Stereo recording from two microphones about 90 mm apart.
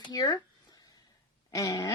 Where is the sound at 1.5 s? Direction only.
40° left (ahead or behind).